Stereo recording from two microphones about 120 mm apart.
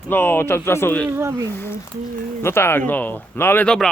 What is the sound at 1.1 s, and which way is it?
Speech, 20° right (ahead or behind).